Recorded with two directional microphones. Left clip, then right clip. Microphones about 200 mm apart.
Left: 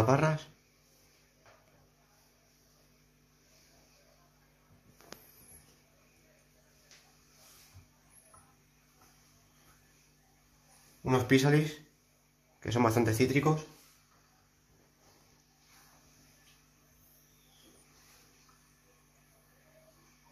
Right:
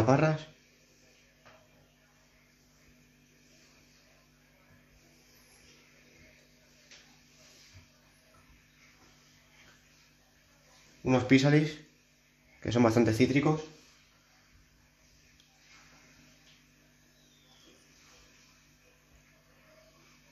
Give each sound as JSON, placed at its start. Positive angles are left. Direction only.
{"t": 0.0, "sound": "speech", "side_deg": -15}
{"t": 11.1, "sound": "speech", "side_deg": -15}